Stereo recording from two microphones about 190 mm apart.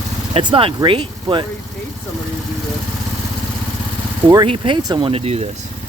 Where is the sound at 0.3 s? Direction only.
30° right (ahead or behind).